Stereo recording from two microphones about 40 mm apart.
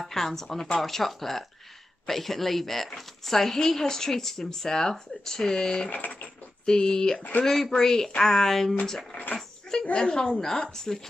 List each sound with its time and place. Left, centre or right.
0.0 s a woman's voice: centre
5.9 s speech: left
6.6 s a woman's voice: centre
9.1 s speech: left
9.9 s a woman's voice: centre